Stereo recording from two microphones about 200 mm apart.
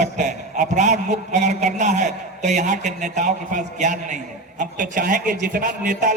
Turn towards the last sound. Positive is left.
turn(degrees=-40)  # may be behind; listen again after turning